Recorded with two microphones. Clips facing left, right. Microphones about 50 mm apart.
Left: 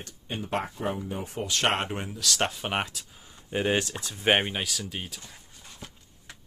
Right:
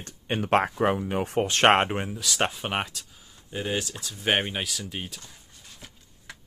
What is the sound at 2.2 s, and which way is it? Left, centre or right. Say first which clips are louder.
Speech: left 2 dB; centre.